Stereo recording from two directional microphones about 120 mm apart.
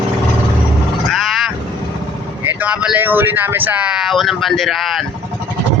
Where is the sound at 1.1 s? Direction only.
Centre (ahead or behind).